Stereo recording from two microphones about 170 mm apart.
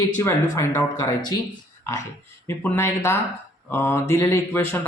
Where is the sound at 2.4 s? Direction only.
15° left (ahead or behind).